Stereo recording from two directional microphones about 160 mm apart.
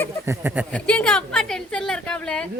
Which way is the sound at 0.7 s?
5° left (ahead or behind).